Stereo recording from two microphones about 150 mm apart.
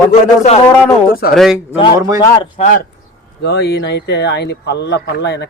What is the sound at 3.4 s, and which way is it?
Speech, 90° left.